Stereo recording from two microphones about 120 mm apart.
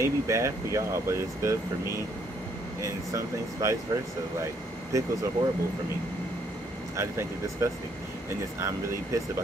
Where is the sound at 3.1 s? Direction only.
25° right (ahead or behind).